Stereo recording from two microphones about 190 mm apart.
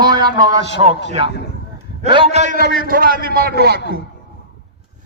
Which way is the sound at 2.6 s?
90° right.